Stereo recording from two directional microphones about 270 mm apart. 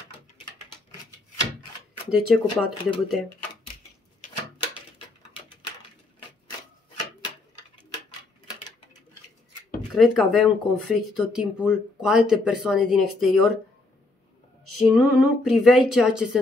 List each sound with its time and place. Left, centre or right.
2.0 s speech: centre
4.9 s a sound: centre
9.9 s speech: centre
15.0 s speech: centre